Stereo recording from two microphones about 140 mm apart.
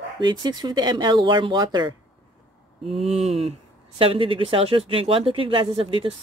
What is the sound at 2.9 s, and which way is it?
A woman's voice, 45° right (ahead or behind).